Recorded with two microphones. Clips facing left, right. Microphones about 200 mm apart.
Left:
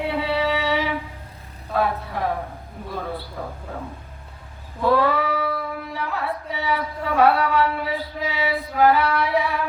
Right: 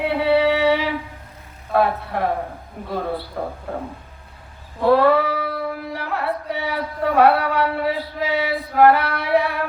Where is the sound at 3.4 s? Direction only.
50° right (ahead or behind).